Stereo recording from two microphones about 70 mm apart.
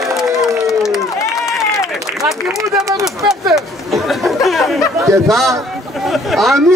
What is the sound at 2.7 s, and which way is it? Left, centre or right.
Speech, centre.